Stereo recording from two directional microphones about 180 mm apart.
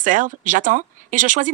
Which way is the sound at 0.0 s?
45° right (ahead or behind).